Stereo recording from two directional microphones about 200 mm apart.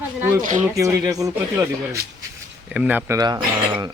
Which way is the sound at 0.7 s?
15° right (ahead or behind).